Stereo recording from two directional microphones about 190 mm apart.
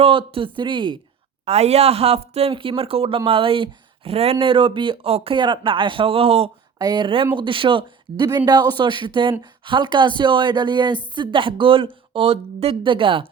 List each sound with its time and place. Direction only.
0.0 s speech: 30° right (ahead or behind)